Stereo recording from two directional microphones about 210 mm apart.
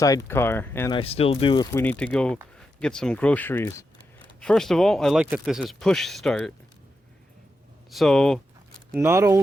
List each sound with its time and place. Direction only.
0.0 s speech: 15° left (ahead or behind)
0.9 s speech: 30° left (ahead or behind)
1.7 s speech: 10° left (ahead or behind)
7.9 s speech: centre (ahead or behind)
9.0 s speech: 10° right (ahead or behind)